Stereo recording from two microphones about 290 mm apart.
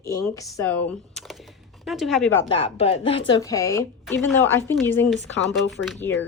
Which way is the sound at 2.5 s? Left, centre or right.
Centre.